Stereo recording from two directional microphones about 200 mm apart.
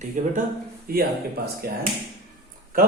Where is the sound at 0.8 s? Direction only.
50° right (ahead or behind).